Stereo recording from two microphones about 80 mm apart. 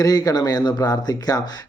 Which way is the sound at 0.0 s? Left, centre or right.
Left.